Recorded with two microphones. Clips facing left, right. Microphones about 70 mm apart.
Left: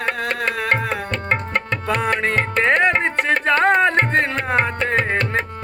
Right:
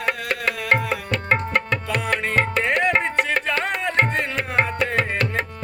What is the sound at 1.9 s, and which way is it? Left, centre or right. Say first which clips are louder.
Music: left 4 dB; left.